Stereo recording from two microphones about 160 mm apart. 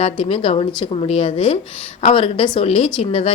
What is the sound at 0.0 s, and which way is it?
A woman's voice, 35° left (ahead or behind).